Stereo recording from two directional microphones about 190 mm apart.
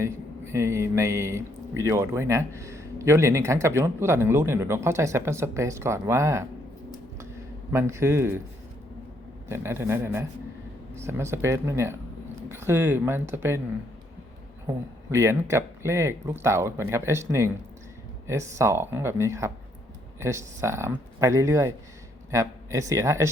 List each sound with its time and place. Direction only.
0.0 s speech: 15° right (ahead or behind)
7.7 s speech: 15° right (ahead or behind)
9.5 s speech: 15° right (ahead or behind)
15.1 s speech: 15° right (ahead or behind)